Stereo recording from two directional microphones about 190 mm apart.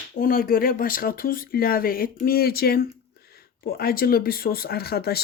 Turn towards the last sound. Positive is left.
turn(degrees=55)  # may be behind; listen again after turning